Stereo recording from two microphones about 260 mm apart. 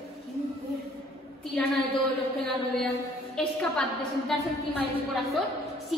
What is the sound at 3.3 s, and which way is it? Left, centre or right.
A woman's voice, centre.